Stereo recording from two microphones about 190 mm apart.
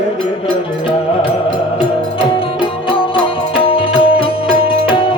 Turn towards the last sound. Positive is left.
turn(degrees=30)  # may be behind; listen again after turning